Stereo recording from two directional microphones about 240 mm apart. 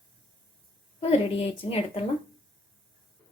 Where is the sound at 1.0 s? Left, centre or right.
Left.